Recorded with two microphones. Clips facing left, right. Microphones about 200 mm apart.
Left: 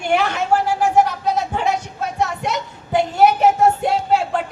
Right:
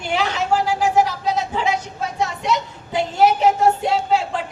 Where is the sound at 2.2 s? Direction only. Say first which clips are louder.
Right 1 dB; 55° left (ahead or behind).